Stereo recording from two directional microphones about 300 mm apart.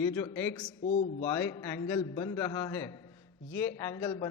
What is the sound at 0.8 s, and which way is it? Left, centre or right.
Speech, left.